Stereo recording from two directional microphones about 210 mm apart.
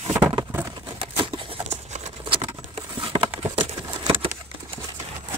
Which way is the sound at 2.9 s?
25° right (ahead or behind).